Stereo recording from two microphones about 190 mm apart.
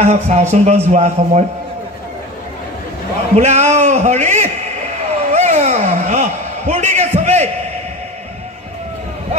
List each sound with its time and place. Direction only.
0.0 s a man's voice: 40° right (ahead or behind)
3.3 s a man's voice: 35° right (ahead or behind)
5.3 s a sound: 35° right (ahead or behind)